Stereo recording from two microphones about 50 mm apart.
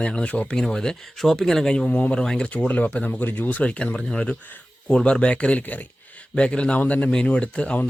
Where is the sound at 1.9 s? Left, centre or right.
Left.